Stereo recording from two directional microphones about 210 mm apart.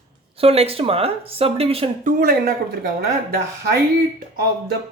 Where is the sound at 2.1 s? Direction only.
45° right (ahead or behind).